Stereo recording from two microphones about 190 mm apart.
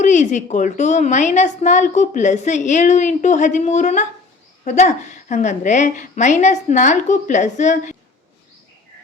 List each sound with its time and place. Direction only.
0.0 s a woman's voice: 40° left (ahead or behind)